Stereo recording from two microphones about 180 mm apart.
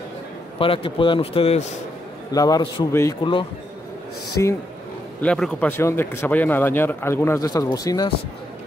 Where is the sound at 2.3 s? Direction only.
20° left (ahead or behind).